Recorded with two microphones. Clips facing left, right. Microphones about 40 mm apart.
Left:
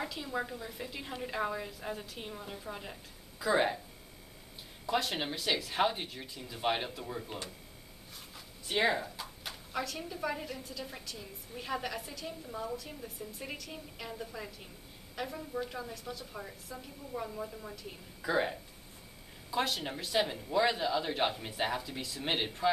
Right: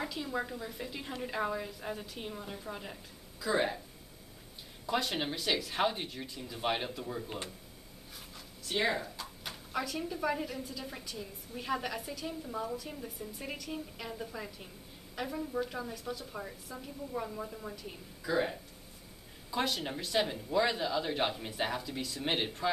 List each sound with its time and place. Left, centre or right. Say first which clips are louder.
0.0 s speech: right 1 dB; centre
3.4 s speech: left 2 dB; centre
4.8 s speech: even; centre
8.6 s speech: left 2 dB; centre
18.2 s speech: left 1 dB; centre
19.5 s speech: even; centre